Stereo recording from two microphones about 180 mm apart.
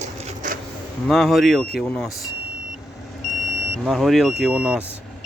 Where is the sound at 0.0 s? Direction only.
45° right (ahead or behind).